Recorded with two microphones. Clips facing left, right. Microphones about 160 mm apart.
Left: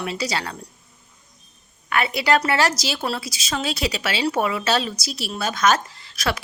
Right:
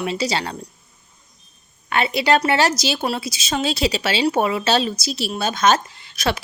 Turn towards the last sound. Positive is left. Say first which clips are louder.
# right 3 dB
turn(degrees=-25)  # may be behind; listen again after turning